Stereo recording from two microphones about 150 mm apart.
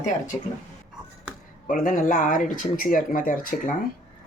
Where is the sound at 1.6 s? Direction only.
65° left (ahead or behind).